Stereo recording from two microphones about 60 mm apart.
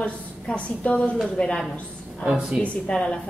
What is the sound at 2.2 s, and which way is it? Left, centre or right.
Speech, centre.